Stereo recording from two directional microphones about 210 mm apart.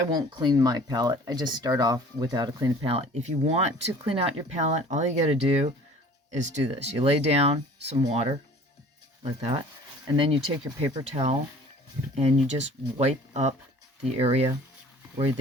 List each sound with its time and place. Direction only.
0.1 s speech: 20° right (ahead or behind)
2.8 s speech: 30° right (ahead or behind)
13.0 s speech: 30° right (ahead or behind)